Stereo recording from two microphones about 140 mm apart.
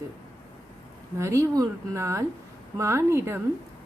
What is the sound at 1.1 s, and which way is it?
A woman's voice, 20° right (ahead or behind).